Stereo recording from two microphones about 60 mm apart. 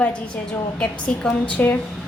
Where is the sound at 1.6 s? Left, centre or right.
Left.